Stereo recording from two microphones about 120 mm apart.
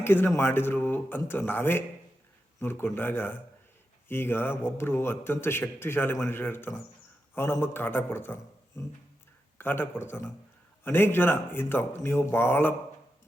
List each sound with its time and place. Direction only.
0.0 s a man's voice: 20° left (ahead or behind)